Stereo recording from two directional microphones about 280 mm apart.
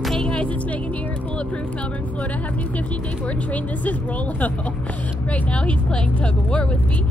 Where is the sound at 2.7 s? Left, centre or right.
Centre.